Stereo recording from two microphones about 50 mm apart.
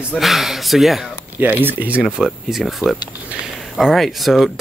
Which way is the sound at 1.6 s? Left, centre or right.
Right.